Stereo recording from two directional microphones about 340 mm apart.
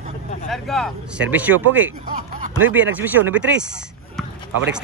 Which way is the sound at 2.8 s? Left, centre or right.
Centre.